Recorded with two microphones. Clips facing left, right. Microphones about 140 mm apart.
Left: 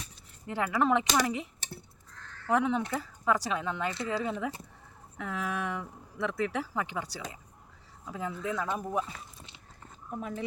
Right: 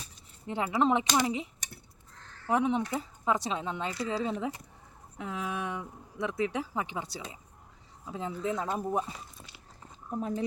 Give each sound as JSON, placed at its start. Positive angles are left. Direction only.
{"t": 0.4, "sound": "speech", "side_deg": -20}
{"t": 2.5, "sound": "speech", "side_deg": -20}
{"t": 10.2, "sound": "speech", "side_deg": -35}